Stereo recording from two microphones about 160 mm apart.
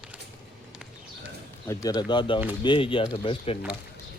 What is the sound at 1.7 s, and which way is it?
Speech, 20° left (ahead or behind).